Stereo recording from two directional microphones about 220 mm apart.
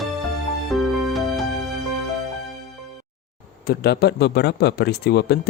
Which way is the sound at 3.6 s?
45° left (ahead or behind).